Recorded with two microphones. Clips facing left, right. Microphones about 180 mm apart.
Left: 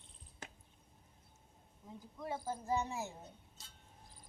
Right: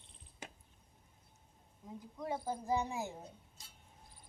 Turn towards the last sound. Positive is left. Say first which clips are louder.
# right 2 dB
turn(degrees=-15)  # may be behind; listen again after turning